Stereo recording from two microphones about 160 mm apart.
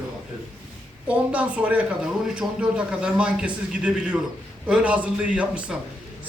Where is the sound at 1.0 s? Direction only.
10° right (ahead or behind).